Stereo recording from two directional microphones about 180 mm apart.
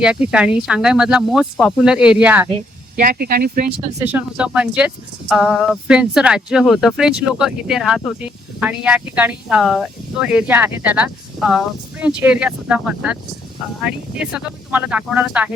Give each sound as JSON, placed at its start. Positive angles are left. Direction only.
{"t": 0.0, "sound": "speech", "side_deg": -5}
{"t": 3.0, "sound": "speech", "side_deg": -55}
{"t": 4.0, "sound": "speech", "side_deg": -5}